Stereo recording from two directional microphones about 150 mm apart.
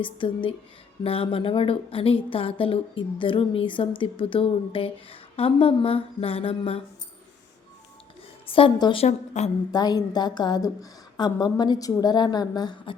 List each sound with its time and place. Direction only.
0.0 s speech: 35° left (ahead or behind)
8.4 s speech: 35° left (ahead or behind)
9.0 s a woman's voice: 50° left (ahead or behind)
9.7 s a woman's voice: 25° left (ahead or behind)